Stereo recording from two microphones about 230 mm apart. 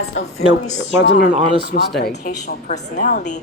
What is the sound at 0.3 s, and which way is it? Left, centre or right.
A woman's voice, left.